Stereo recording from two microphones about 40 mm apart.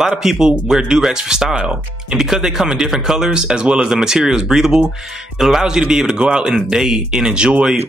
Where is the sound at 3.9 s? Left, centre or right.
Centre.